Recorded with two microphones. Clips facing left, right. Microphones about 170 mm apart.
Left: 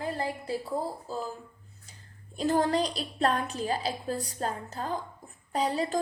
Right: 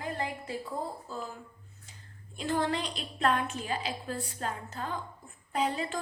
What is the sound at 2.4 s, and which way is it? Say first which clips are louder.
A woman's voice: left 5 dB; 40° left (ahead or behind).